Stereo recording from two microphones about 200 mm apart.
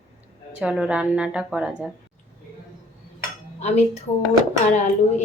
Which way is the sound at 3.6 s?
35° left (ahead or behind).